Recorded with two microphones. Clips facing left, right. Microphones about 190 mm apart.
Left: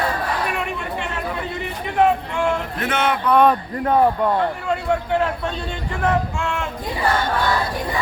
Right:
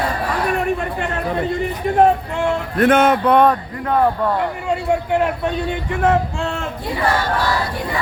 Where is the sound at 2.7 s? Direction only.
50° right (ahead or behind).